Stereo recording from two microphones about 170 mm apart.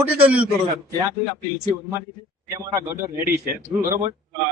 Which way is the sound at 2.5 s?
20° right (ahead or behind).